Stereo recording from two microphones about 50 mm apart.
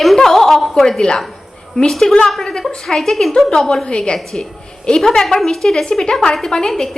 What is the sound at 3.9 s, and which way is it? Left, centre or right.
A woman's voice, centre.